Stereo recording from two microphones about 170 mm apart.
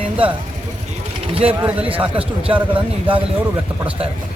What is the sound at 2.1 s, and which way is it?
Speech, 35° right (ahead or behind).